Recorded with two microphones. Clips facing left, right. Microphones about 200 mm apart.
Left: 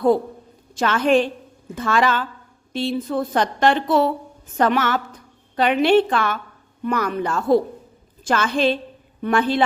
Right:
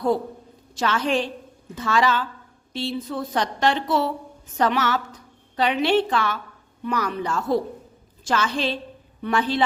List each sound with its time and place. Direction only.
0.8 s a woman's voice: 55° left (ahead or behind)